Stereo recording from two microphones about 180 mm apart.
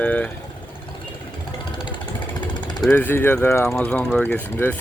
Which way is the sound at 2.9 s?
10° left (ahead or behind).